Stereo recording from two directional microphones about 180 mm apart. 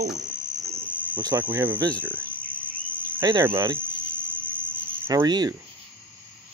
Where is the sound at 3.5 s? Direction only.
15° right (ahead or behind).